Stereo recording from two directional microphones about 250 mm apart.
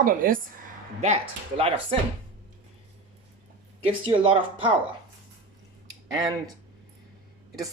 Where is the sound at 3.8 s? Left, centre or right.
Right.